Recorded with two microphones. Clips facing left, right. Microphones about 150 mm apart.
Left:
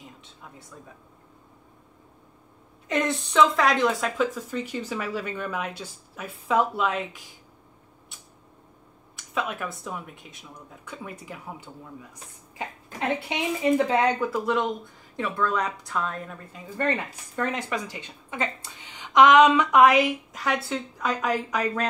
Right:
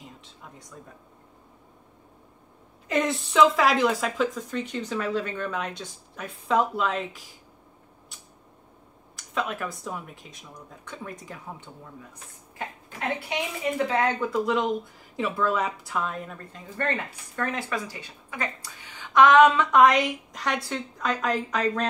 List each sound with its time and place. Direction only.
0.0 s a sound: centre (ahead or behind)
2.9 s speech: centre (ahead or behind)
9.1 s speech: centre (ahead or behind)
13.9 s speech: 15° left (ahead or behind)
14.3 s speech: centre (ahead or behind)
16.5 s speech: 15° left (ahead or behind)